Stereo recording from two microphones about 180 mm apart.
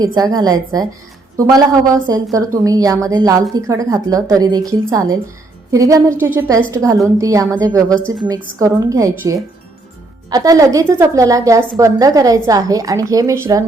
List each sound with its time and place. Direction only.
0.0 s a woman's voice: 20° right (ahead or behind)